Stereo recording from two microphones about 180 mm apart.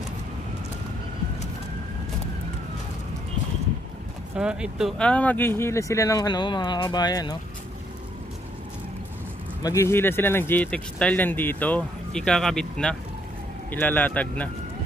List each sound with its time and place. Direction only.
4.4 s speech: 5° right (ahead or behind); by 7.3 s 20° left (ahead or behind)
9.6 s speech: 15° left (ahead or behind)